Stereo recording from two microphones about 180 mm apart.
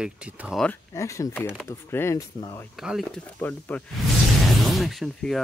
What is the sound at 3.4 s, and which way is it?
Speech, 10° left (ahead or behind).